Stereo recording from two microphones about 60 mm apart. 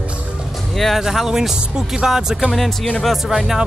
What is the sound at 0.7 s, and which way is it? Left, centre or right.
Speech, centre.